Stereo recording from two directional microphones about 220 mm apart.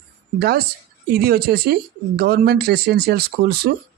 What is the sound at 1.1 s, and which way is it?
Speech, 45° right (ahead or behind).